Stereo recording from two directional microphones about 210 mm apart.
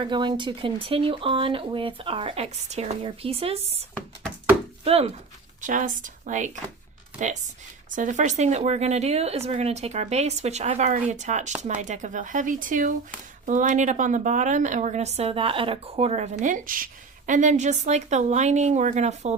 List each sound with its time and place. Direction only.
0.0 s a woman's voice: 20° right (ahead or behind)
7.9 s a woman's voice: 35° right (ahead or behind)